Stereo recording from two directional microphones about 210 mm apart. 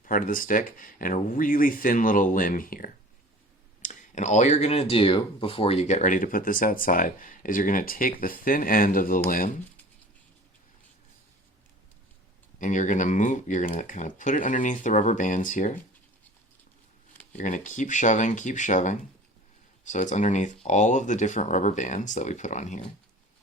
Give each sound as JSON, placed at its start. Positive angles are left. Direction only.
{"t": 0.0, "sound": "speech", "side_deg": 40}
{"t": 12.5, "sound": "speech", "side_deg": 35}
{"t": 17.3, "sound": "speech", "side_deg": 35}